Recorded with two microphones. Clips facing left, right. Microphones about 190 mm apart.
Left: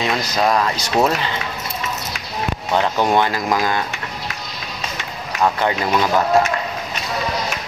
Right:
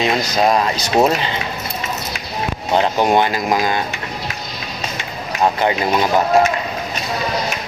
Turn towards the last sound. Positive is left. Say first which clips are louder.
# right 1 dB
turn(degrees=-20)  # may be behind; listen again after turning